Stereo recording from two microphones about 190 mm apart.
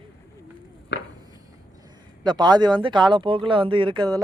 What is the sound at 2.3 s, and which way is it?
Speech, 20° right (ahead or behind).